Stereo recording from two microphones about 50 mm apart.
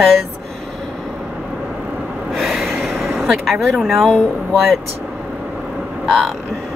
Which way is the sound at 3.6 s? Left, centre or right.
Centre.